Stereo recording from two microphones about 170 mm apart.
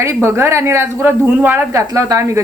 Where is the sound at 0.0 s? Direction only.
15° right (ahead or behind).